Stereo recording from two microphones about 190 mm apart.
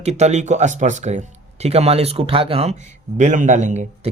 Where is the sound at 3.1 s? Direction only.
40° right (ahead or behind).